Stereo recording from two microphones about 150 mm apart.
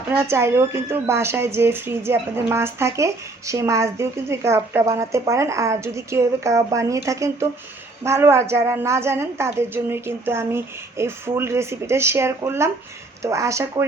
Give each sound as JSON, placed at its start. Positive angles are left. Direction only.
{"t": 0.1, "sound": "a woman's voice", "side_deg": -15}